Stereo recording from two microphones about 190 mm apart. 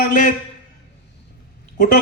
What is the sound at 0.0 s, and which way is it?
Speech, 45° left (ahead or behind).